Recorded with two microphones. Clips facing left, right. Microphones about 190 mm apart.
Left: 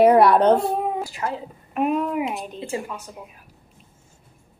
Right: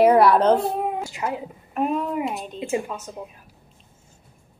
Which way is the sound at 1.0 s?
20° right (ahead or behind).